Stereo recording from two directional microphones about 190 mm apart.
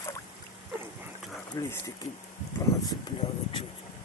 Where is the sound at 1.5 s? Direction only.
15° left (ahead or behind).